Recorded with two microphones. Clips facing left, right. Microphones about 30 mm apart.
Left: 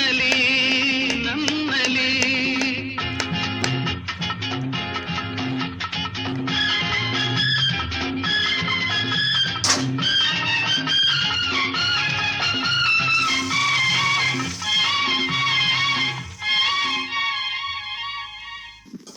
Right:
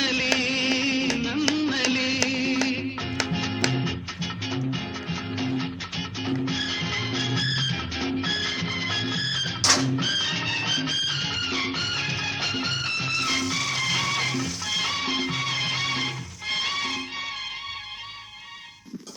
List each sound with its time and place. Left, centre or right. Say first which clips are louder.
0.0 s music: left 5 dB; left
3.8 s music: left 5 dB; left
9.6 s music: even; centre
9.9 s music: left 5 dB; left
10.9 s music: left 7 dB; left
11.3 s music: left 5 dB; left
13.1 s music: left 5 dB; centre
14.8 s music: left 6 dB; left